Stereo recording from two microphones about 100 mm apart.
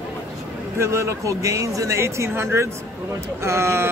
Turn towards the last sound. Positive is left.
turn(degrees=-25)  # may be behind; listen again after turning